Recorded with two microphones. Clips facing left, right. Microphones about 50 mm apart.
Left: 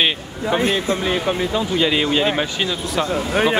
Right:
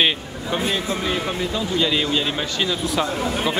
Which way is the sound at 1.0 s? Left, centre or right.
Centre.